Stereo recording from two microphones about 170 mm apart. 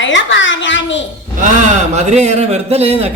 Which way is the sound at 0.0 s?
90° left.